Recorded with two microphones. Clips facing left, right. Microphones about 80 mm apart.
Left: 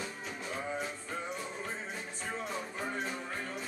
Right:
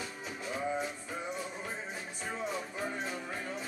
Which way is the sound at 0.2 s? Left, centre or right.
Centre.